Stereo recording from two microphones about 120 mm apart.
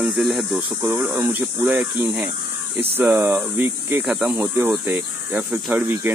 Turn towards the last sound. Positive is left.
turn(degrees=-15)  # may be behind; listen again after turning